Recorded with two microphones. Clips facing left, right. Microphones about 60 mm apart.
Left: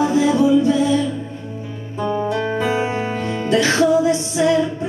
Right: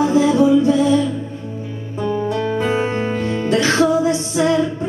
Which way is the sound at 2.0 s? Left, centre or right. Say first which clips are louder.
Right 1 dB; left.